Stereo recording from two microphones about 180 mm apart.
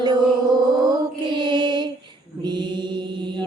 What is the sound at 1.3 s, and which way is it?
Mantra, 25° right (ahead or behind).